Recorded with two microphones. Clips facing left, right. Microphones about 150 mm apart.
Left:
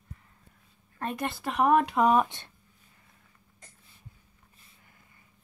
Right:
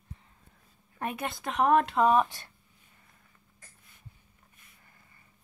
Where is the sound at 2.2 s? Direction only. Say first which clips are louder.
Left 1 dB; 20° left (ahead or behind).